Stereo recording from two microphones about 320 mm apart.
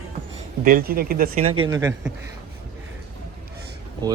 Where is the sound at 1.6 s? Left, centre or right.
Centre.